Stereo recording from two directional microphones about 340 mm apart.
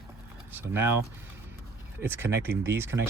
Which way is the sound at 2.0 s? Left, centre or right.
Centre.